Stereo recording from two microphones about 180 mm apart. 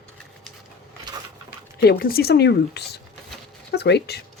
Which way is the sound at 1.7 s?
60° left (ahead or behind).